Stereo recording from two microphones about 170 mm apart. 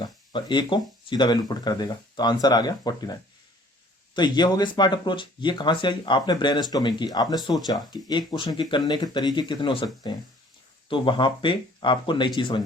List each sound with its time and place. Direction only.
0.0 s speech: 25° left (ahead or behind)